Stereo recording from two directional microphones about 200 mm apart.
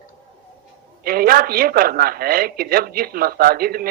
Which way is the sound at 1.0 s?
50° right (ahead or behind).